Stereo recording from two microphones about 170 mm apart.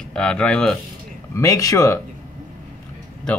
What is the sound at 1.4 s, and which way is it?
Speech, 20° left (ahead or behind).